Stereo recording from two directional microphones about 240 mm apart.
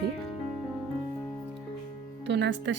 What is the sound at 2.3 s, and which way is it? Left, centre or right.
Music, right.